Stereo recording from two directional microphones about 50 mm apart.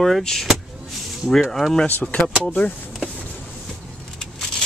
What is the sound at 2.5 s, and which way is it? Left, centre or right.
Speech, left.